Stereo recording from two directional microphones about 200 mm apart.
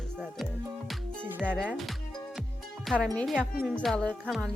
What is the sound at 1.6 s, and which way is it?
Speech, 5° right (ahead or behind).